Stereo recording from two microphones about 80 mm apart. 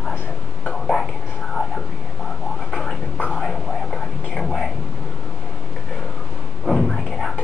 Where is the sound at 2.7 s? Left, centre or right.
Centre.